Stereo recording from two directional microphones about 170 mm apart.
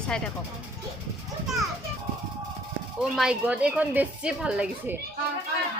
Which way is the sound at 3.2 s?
5° right (ahead or behind).